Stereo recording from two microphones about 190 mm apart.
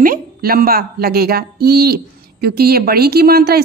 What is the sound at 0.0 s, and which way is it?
A woman's voice, 50° right (ahead or behind).